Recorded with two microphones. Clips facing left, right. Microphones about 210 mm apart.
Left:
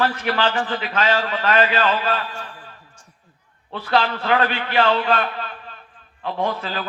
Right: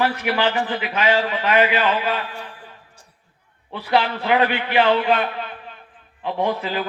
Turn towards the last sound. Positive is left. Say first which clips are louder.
# right 2 dB
turn(degrees=-15)  # may be behind; listen again after turning